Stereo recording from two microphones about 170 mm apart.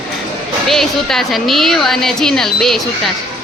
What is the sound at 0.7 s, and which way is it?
A woman's voice, centre (ahead or behind).